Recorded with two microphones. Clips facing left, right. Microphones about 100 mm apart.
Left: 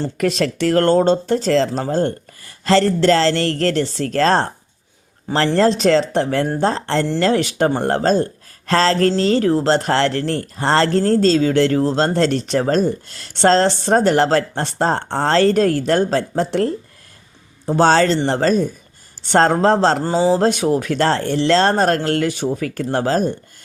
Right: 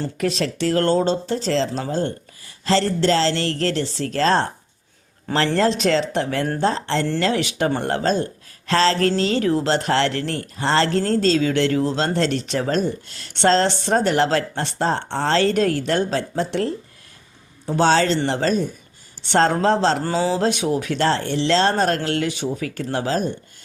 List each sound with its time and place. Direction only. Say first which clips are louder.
0.2 s speech: left 4 dB; 60° left (ahead or behind)
5.5 s speech: left 6 dB; 35° left (ahead or behind)
20.0 s speech: left 4 dB; 20° left (ahead or behind)
20.3 s speech: left 4 dB; 45° left (ahead or behind)